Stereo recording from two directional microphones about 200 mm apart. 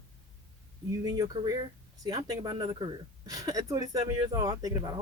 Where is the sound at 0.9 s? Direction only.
15° right (ahead or behind).